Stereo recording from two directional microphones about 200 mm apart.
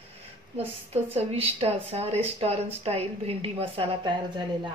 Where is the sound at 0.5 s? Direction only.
30° right (ahead or behind).